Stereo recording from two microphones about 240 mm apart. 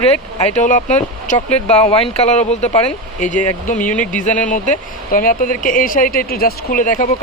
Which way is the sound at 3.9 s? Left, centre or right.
Centre.